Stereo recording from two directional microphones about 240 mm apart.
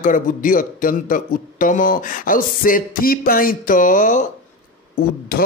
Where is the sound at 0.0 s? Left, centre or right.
Left.